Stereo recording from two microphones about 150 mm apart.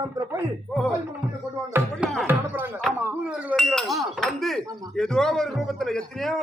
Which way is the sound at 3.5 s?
Centre (ahead or behind).